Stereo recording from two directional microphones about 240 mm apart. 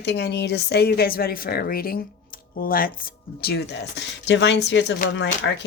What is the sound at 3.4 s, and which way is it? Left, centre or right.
Speech, left.